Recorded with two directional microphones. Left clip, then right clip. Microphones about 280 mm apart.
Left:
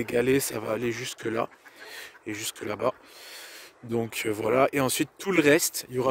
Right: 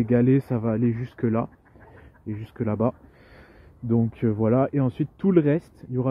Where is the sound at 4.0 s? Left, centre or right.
Left.